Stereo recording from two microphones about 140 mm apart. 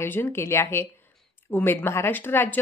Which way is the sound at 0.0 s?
15° left (ahead or behind).